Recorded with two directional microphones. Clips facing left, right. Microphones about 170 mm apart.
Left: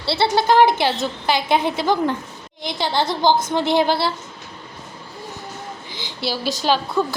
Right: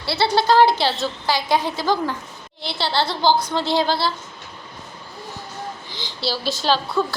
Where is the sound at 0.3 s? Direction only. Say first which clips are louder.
Even; 20° left (ahead or behind).